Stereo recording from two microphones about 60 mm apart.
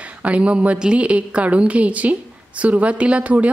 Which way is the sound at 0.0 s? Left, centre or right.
Right.